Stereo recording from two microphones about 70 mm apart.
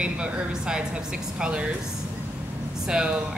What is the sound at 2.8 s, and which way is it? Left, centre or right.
Speech, centre.